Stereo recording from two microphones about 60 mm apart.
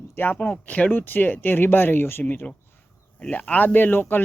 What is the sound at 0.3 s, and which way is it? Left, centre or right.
Speech, left.